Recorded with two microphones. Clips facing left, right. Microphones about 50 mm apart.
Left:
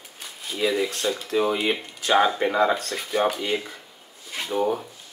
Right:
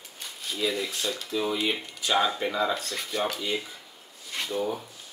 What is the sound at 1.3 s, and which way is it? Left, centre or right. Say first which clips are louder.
Speech: left 6 dB; left.